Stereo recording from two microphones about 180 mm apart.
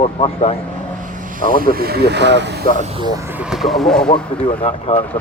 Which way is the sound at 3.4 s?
Centre (ahead or behind).